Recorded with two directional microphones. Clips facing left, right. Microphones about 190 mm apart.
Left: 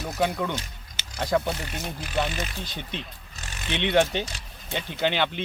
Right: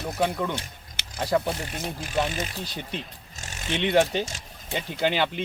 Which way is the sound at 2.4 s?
35° right (ahead or behind).